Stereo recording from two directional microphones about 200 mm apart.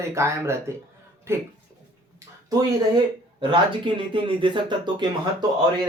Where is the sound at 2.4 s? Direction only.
20° right (ahead or behind).